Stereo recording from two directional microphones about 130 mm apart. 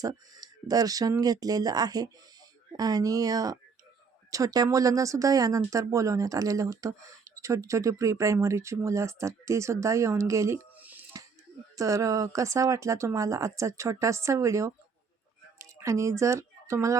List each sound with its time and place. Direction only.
0.0 s speech: 30° right (ahead or behind)
10.8 s music: 10° right (ahead or behind)
11.8 s speech: 25° right (ahead or behind)